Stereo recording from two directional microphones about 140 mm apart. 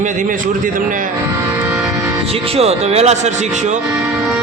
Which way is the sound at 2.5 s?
50° right (ahead or behind).